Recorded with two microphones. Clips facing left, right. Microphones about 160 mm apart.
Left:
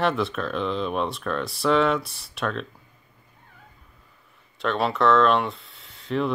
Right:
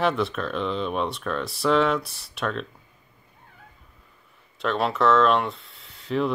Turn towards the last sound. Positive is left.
turn(degrees=0)  # may be behind; listen again after turning